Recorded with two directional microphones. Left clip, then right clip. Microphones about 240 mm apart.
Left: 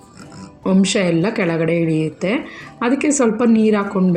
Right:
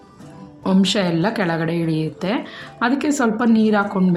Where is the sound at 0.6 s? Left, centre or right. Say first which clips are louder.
Left 2 dB; centre.